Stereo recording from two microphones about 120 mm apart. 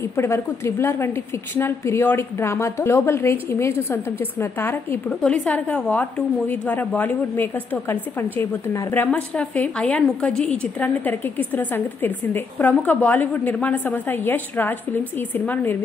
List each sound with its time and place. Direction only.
0.1 s a woman's voice: 20° left (ahead or behind)
5.2 s a woman's voice: 5° left (ahead or behind)